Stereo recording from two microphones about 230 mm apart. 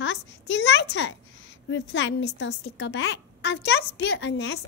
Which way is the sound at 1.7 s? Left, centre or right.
Left.